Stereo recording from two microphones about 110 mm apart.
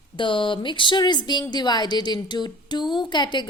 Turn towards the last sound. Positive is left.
turn(degrees=40)  # may be behind; listen again after turning